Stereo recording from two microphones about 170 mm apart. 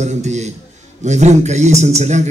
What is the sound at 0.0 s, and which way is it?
A man's voice, 40° right (ahead or behind).